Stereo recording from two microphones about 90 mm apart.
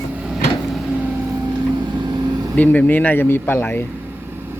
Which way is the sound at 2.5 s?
15° left (ahead or behind).